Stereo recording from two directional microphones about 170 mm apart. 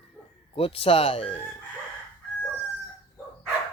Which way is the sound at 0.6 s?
35° left (ahead or behind).